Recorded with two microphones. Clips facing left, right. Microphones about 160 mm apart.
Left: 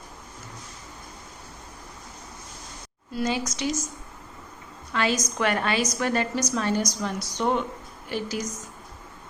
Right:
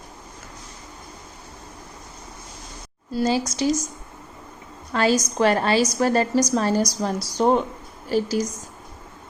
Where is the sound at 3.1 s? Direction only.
35° right (ahead or behind).